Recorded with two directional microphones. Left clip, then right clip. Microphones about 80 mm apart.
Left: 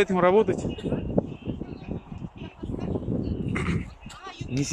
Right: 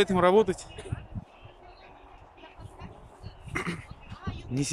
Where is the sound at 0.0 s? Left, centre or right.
Centre.